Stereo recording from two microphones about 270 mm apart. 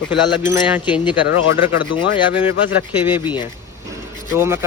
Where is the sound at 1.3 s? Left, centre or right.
Left.